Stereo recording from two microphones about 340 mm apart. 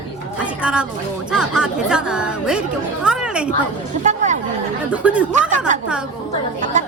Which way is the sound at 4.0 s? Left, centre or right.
Right.